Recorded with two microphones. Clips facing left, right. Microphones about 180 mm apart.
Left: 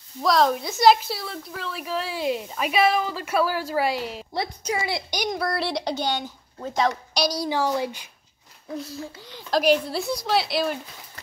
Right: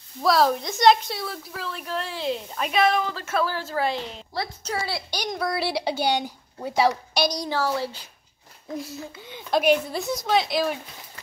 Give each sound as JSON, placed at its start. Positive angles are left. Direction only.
{"t": 0.2, "sound": "a woman's voice", "side_deg": -5}
{"t": 5.3, "sound": "speech", "side_deg": 0}
{"t": 7.4, "sound": "a woman's voice", "side_deg": 15}
{"t": 9.5, "sound": "a woman's voice", "side_deg": 0}